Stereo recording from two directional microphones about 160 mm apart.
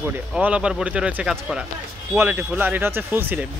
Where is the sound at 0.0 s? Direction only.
10° right (ahead or behind).